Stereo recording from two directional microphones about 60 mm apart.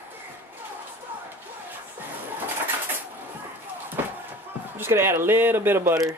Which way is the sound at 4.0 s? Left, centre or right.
Right.